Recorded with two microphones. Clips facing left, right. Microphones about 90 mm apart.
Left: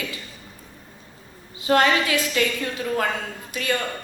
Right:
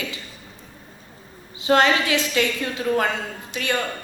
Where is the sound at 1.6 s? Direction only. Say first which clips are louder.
Right 1 dB; 25° right (ahead or behind).